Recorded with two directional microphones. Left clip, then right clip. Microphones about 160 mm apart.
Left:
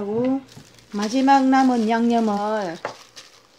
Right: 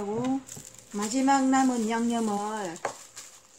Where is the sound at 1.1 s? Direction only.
40° left (ahead or behind).